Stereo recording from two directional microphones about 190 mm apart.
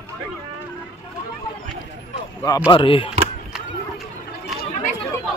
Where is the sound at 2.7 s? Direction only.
25° left (ahead or behind).